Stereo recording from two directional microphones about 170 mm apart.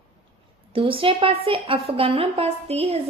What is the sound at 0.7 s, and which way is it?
A woman's voice, 30° right (ahead or behind).